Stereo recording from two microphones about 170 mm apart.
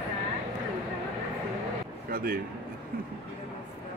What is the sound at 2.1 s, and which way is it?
Speech, 60° right (ahead or behind).